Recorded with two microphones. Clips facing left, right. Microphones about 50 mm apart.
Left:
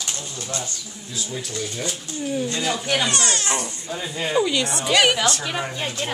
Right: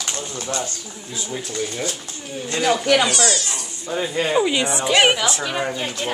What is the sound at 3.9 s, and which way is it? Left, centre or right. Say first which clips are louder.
Speech: right 6 dB; right.